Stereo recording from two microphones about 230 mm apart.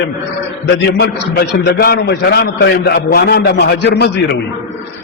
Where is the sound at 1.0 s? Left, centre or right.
Left.